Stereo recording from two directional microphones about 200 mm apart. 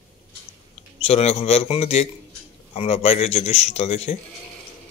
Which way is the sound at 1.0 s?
30° left (ahead or behind).